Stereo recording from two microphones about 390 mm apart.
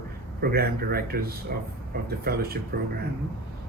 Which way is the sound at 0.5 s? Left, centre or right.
Right.